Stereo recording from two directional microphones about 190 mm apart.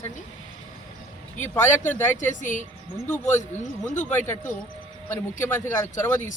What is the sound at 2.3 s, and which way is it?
Speech, 40° left (ahead or behind).